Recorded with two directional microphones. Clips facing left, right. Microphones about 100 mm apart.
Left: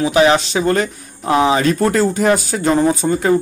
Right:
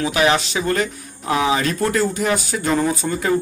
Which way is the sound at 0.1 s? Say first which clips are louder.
Left 6 dB; 30° left (ahead or behind).